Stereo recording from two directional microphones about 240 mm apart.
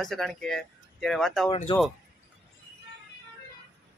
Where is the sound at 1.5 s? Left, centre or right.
Left.